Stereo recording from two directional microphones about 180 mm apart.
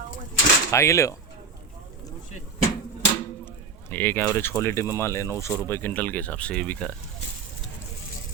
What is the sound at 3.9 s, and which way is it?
Speech, 10° left (ahead or behind).